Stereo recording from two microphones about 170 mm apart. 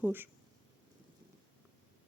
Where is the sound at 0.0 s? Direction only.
10° right (ahead or behind).